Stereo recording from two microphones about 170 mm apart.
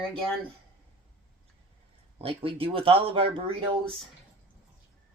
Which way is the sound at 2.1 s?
35° right (ahead or behind).